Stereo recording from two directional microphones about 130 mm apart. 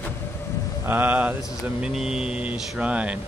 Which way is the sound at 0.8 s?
15° right (ahead or behind).